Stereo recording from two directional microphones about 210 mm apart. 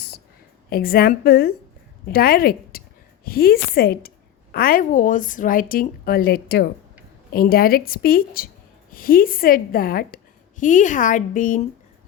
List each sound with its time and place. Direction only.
0.7 s a woman's voice: 45° left (ahead or behind)